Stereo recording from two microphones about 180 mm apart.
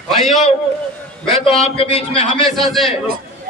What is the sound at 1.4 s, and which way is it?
Speech, 35° left (ahead or behind).